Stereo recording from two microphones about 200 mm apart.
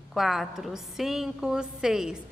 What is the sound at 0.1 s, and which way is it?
A woman's voice, centre (ahead or behind).